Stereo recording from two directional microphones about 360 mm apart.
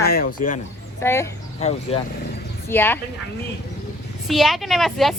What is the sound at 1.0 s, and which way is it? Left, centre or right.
Speech, centre.